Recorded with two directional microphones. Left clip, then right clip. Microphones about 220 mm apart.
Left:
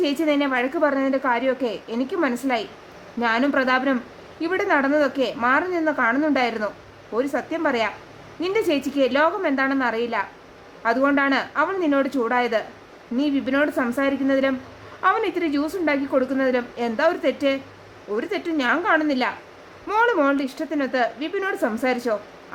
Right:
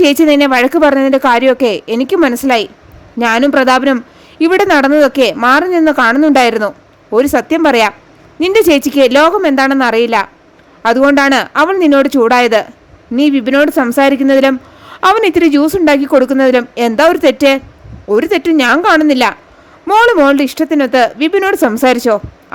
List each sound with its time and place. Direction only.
0.0 s a woman's voice: 40° right (ahead or behind)